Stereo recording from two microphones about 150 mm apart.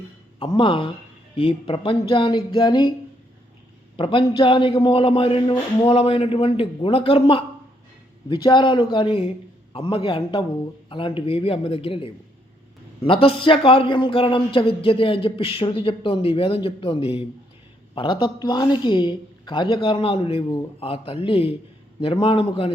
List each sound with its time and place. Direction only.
0.3 s a man's voice: 30° left (ahead or behind)
3.9 s a man's voice: 35° left (ahead or behind)